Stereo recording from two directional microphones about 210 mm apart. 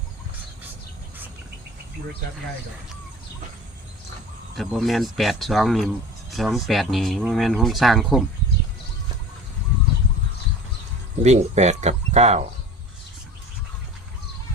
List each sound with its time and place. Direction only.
4.5 s speech: centre (ahead or behind)
11.2 s speech: 30° right (ahead or behind)